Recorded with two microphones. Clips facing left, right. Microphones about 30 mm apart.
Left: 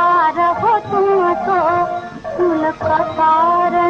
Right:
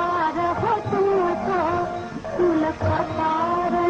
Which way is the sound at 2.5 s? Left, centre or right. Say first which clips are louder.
Left 6 dB; centre.